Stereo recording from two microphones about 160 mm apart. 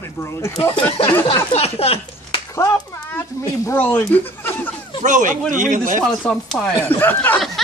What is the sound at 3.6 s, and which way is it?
Speech, 10° left (ahead or behind).